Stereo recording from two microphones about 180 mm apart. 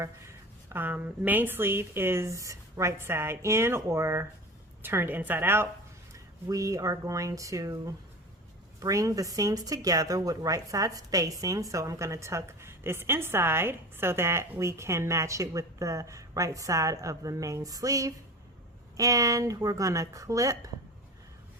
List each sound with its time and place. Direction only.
0.7 s speech: 10° right (ahead or behind)